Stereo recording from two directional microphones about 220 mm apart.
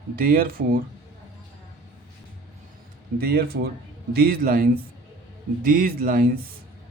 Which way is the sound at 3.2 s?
45° right (ahead or behind).